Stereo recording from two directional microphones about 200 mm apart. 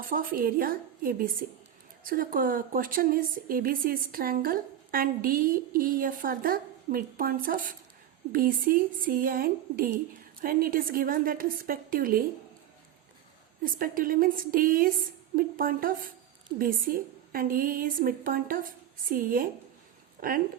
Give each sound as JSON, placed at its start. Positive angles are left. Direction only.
{"t": 0.0, "sound": "a woman's voice", "side_deg": -45}
{"t": 13.6, "sound": "a woman's voice", "side_deg": -45}